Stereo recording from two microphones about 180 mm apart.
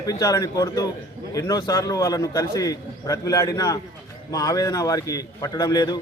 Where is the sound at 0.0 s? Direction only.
20° left (ahead or behind).